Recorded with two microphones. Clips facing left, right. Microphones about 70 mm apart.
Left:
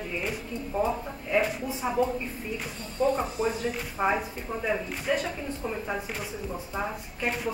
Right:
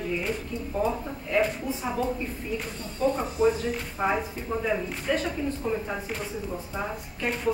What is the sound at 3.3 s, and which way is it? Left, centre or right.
A woman's voice, centre.